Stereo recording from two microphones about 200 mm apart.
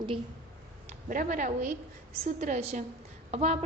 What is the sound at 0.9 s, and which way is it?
A woman's voice, 40° right (ahead or behind).